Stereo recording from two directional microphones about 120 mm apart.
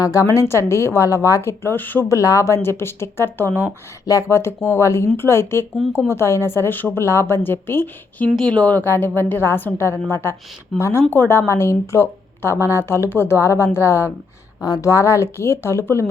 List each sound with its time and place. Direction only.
0.0 s a woman's voice: 25° left (ahead or behind)
8.4 s a woman's voice: 10° left (ahead or behind)